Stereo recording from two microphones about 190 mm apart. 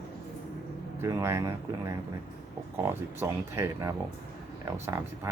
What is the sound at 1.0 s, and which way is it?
Speech, 15° right (ahead or behind).